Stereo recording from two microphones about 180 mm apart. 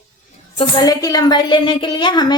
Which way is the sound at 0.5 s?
30° left (ahead or behind).